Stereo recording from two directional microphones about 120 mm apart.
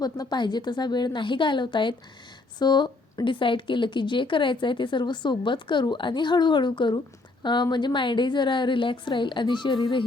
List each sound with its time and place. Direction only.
0.0 s a woman's voice: 35° left (ahead or behind)